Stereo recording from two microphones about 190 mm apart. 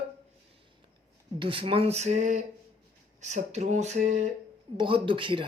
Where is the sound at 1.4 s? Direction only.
30° right (ahead or behind).